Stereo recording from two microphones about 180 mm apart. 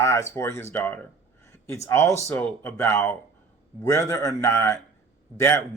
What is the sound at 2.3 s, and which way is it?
Speech, 10° left (ahead or behind).